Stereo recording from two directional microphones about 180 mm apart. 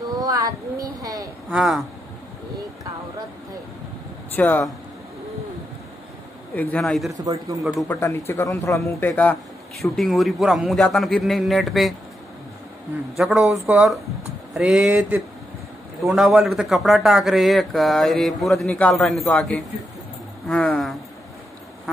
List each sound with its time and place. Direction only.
0.2 s a sound: 20° right (ahead or behind)
1.5 s a man's voice: centre (ahead or behind)
4.4 s a man's voice: 10° left (ahead or behind)
6.5 s a man's voice: 10° left (ahead or behind)
7.2 s speech: 20° right (ahead or behind)
7.9 s a man's voice: 15° left (ahead or behind); by 11.9 s centre (ahead or behind)
13.1 s a man's voice: centre (ahead or behind)